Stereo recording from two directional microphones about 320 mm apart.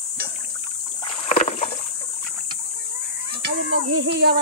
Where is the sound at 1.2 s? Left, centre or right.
Centre.